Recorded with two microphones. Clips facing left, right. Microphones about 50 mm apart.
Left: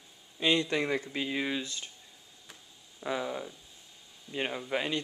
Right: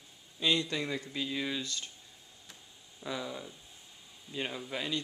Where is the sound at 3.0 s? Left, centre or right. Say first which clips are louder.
Left 5 dB; left.